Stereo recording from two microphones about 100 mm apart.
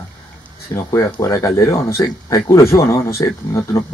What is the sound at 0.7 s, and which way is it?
Speech, 30° left (ahead or behind).